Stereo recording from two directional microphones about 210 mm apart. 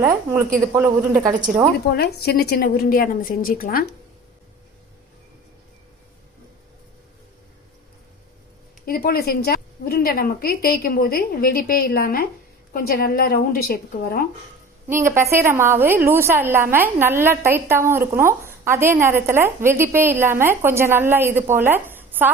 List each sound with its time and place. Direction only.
0.0 s a woman's voice: 10° right (ahead or behind)
1.5 s a woman's voice: 5° right (ahead or behind)
1.9 s a woman's voice: 50° left (ahead or behind)
8.9 s a woman's voice: 45° left (ahead or behind)
14.8 s a woman's voice: 10° right (ahead or behind)